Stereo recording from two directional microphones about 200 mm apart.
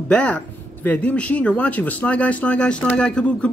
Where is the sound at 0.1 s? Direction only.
5° left (ahead or behind).